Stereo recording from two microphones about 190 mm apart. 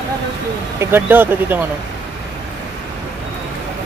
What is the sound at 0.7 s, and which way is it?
Speech, 10° right (ahead or behind).